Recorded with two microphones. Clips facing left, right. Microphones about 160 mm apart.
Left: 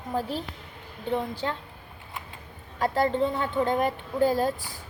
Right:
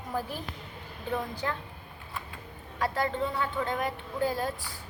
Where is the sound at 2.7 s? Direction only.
30° left (ahead or behind).